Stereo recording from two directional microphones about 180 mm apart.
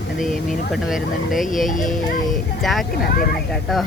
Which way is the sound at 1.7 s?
45° left (ahead or behind).